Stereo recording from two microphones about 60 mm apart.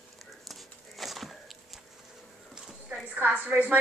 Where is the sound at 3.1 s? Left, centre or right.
Right.